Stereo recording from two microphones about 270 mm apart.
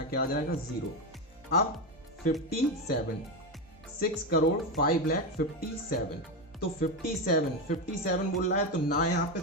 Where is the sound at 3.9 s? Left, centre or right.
Left.